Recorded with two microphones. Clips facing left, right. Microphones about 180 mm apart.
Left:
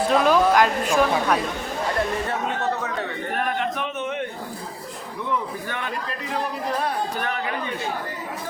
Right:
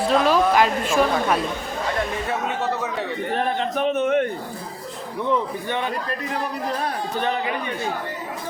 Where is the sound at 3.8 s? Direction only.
50° right (ahead or behind).